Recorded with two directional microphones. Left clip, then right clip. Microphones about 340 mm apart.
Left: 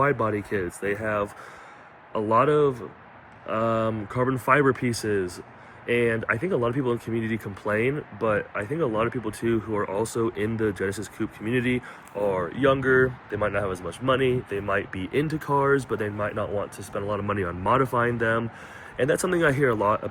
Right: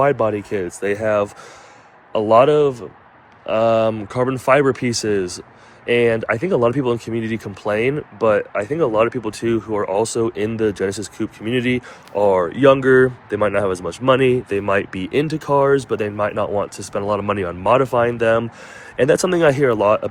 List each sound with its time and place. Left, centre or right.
0.0 s speech: centre